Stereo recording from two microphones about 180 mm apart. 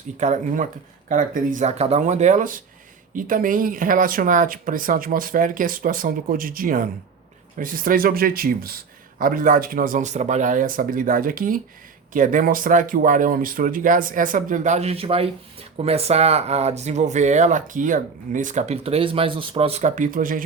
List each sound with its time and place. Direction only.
0.2 s speech: 45° right (ahead or behind)